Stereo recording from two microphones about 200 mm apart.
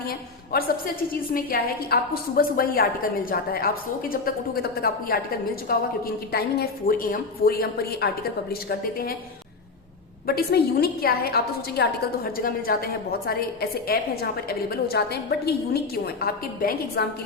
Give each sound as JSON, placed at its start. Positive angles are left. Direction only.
{"t": 1.3, "sound": "a woman's voice", "side_deg": 50}
{"t": 10.2, "sound": "a woman's voice", "side_deg": 50}